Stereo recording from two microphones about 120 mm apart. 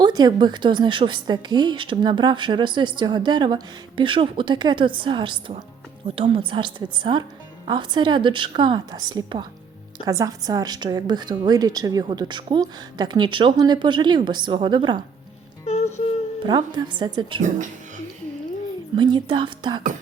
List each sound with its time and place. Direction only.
0.0 s a woman's voice: 35° right (ahead or behind)
15.6 s music: 60° left (ahead or behind)
16.5 s a woman's voice: 35° right (ahead or behind)
18.9 s a woman's voice: 40° right (ahead or behind)